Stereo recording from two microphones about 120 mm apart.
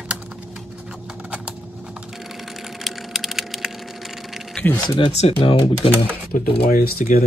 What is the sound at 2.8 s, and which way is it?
Splinter, centre (ahead or behind).